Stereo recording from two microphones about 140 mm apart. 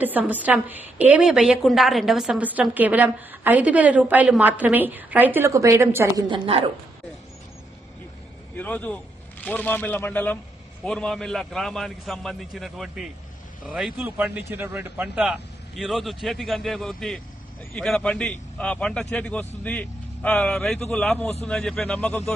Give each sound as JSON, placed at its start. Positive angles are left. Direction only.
{"t": 0.0, "sound": "a woman's voice", "side_deg": -10}
{"t": 6.2, "sound": "a woman's voice", "side_deg": -40}
{"t": 8.5, "sound": "a man's voice", "side_deg": 10}
{"t": 14.0, "sound": "a man's voice", "side_deg": -10}